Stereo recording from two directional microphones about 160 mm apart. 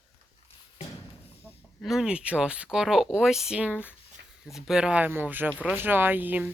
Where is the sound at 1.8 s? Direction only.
Centre (ahead or behind).